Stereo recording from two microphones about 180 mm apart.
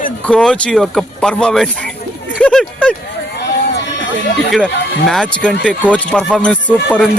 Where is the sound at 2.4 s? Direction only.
5° left (ahead or behind).